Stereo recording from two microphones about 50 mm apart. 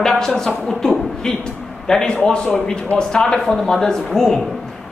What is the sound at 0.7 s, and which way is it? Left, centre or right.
A man's voice, centre.